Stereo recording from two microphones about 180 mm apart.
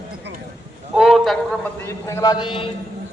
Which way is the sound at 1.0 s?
Centre (ahead or behind).